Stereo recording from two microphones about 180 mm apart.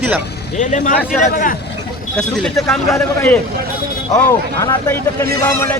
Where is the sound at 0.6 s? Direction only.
45° left (ahead or behind).